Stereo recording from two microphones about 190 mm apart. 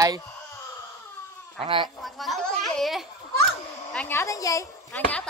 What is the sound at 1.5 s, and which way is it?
Speech, 25° right (ahead or behind).